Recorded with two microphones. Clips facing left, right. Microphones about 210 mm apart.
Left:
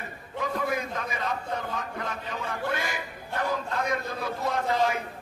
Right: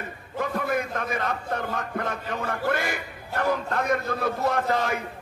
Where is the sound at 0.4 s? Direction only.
60° right (ahead or behind).